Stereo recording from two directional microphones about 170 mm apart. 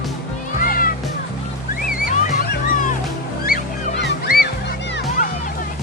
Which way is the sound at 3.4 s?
60° left (ahead or behind).